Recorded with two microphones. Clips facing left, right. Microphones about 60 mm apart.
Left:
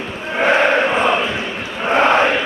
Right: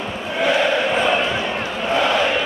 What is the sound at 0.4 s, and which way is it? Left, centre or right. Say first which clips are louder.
Chant: left 4 dB; left.